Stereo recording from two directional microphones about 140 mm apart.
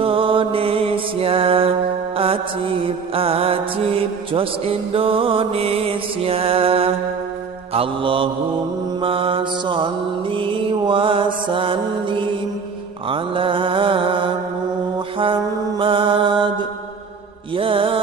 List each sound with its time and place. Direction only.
0.0 s music: 40° right (ahead or behind)
7.7 s mantra: 40° right (ahead or behind)
15.8 s mantra: 40° right (ahead or behind)
17.6 s music: 40° right (ahead or behind)